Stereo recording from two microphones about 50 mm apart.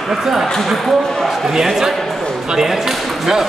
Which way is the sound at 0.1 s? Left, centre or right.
Centre.